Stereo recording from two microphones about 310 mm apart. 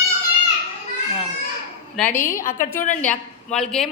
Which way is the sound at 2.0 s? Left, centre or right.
Left.